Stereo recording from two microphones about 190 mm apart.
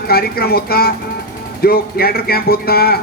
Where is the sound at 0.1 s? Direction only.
55° left (ahead or behind).